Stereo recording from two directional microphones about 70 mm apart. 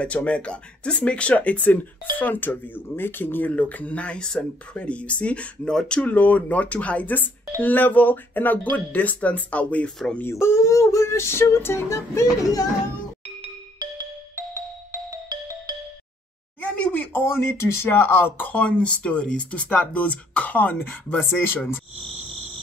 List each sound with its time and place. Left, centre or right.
0.0 s speech: centre
5.9 s speech: left
9.8 s speech: centre
10.3 s a sound: left
14.3 s music: right
16.6 s speech: left